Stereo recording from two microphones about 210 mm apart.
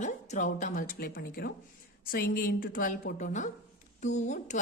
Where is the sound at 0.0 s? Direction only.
35° left (ahead or behind).